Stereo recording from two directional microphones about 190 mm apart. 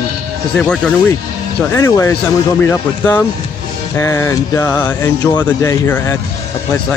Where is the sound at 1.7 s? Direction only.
15° left (ahead or behind).